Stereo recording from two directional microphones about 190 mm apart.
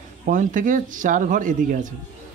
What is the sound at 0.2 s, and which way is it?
Speech, 45° right (ahead or behind).